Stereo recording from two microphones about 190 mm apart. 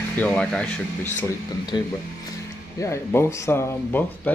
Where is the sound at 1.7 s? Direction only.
20° left (ahead or behind).